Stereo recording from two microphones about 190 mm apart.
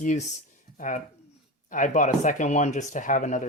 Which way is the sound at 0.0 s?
40° left (ahead or behind).